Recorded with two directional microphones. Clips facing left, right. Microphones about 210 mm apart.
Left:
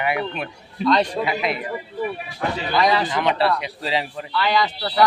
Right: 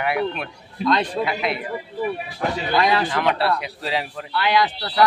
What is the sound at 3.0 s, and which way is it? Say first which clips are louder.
A man's voice: left 1 dB; centre (ahead or behind).